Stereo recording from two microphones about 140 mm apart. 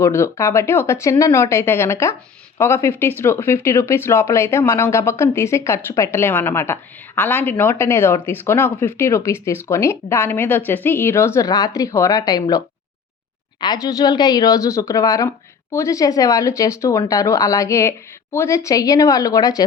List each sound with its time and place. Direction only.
0.0 s speech: 20° left (ahead or behind)
13.8 s speech: 30° left (ahead or behind)